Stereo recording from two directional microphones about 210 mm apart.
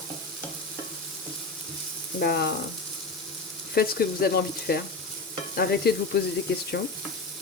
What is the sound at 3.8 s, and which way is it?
Speech, 45° left (ahead or behind).